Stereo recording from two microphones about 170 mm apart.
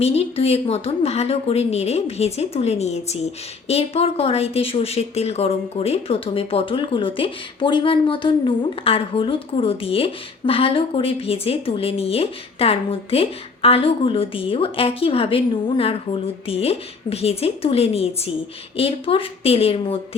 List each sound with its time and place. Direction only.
0.0 s a woman's voice: 35° left (ahead or behind)